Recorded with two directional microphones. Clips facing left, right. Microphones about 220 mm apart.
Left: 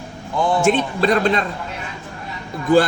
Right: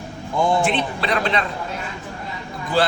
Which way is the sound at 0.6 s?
45° left (ahead or behind).